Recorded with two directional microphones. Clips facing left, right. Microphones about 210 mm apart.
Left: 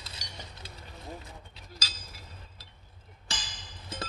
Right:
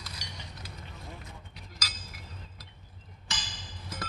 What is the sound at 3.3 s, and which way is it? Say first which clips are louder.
Music: even; 30° left (ahead or behind).